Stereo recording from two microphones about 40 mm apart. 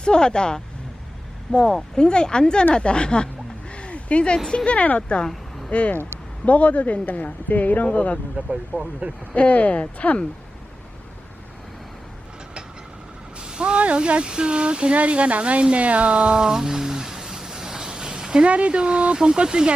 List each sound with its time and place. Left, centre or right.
0.0 s speech: left
3.7 s a sound: left
4.4 s speech: left
5.3 s a sound: centre
6.4 s speech: left
7.0 s speech: left
8.7 s speech: left
9.3 s speech: left
13.4 s speech: right
15.6 s a sound: right
18.4 s speech: right